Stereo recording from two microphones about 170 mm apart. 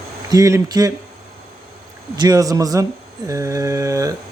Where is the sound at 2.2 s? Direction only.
20° right (ahead or behind).